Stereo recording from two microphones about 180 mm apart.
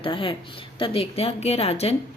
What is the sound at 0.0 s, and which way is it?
A woman's voice, 30° left (ahead or behind).